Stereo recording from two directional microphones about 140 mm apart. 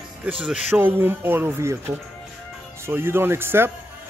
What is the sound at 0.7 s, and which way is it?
Speech, 15° right (ahead or behind).